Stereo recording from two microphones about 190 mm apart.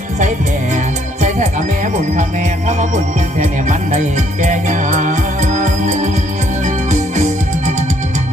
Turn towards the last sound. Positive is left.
turn(degrees=-40)  # may be behind; listen again after turning